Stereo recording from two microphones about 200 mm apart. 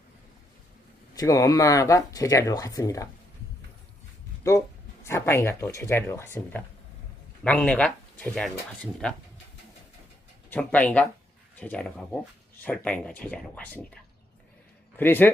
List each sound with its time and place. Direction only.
1.1 s speech: 15° left (ahead or behind)
5.0 s speech: 15° left (ahead or behind)
10.5 s speech: 5° left (ahead or behind)
14.9 s speech: 10° left (ahead or behind)